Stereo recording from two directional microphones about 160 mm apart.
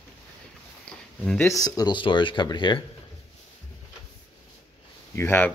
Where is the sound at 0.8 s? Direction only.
5° left (ahead or behind); by 2.9 s 30° left (ahead or behind).